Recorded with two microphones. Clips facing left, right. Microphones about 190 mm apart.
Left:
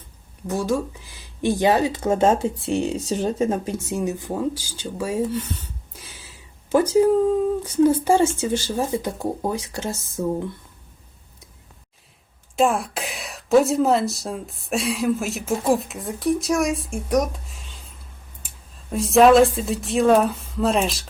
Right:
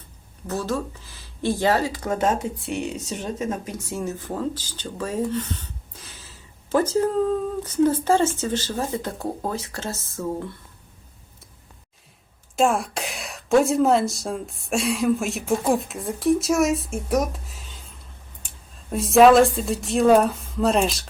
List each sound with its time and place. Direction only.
0.4 s speech: 15° left (ahead or behind); by 3.9 s 30° left (ahead or behind)
3.9 s speech: 15° left (ahead or behind)
12.5 s a woman's voice: centre (ahead or behind)